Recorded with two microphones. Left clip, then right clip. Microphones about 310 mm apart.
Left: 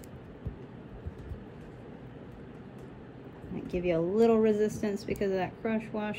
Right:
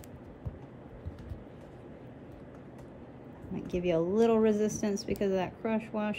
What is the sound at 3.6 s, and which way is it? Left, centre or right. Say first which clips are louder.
Speech: even; centre.